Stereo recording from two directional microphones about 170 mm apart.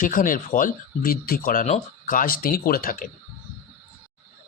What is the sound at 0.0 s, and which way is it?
Speech, 55° left (ahead or behind).